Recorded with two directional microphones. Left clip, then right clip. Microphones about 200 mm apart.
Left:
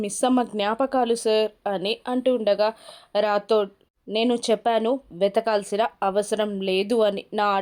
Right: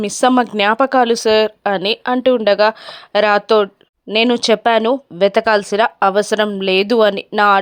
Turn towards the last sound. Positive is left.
turn(degrees=-20)  # may be behind; listen again after turning